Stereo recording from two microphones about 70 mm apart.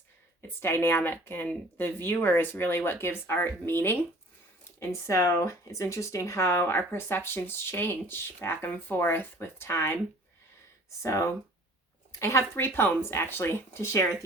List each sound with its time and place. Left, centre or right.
0.4 s speech: left
4.8 s speech: left
11.0 s speech: left